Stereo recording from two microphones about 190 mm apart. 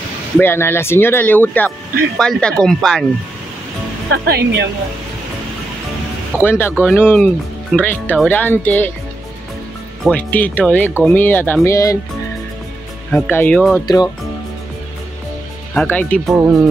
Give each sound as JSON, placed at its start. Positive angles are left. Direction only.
{"t": 0.4, "sound": "speech", "side_deg": 10}
{"t": 4.1, "sound": "speech", "side_deg": -60}
{"t": 6.4, "sound": "speech", "side_deg": 10}
{"t": 10.0, "sound": "speech", "side_deg": 10}
{"t": 13.1, "sound": "speech", "side_deg": 10}
{"t": 13.8, "sound": "speech", "side_deg": 20}
{"t": 15.7, "sound": "speech", "side_deg": 5}
{"t": 16.3, "sound": "speech", "side_deg": -15}